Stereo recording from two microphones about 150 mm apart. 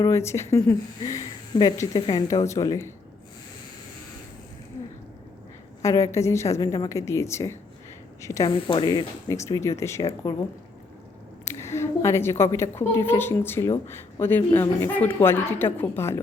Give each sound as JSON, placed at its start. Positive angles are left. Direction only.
{"t": 0.0, "sound": "speech", "side_deg": 20}
{"t": 5.8, "sound": "speech", "side_deg": 20}
{"t": 8.4, "sound": "speech", "side_deg": 35}
{"t": 11.4, "sound": "a woman's voice", "side_deg": 15}